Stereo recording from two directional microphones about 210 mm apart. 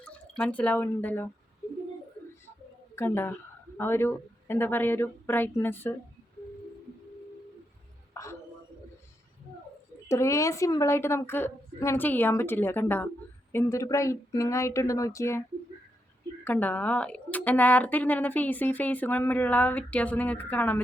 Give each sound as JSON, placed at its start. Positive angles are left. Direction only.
{"t": 0.3, "sound": "speech", "side_deg": 5}
{"t": 2.9, "sound": "a woman's voice", "side_deg": 10}
{"t": 8.1, "sound": "a sound", "side_deg": 15}
{"t": 10.1, "sound": "speech", "side_deg": 15}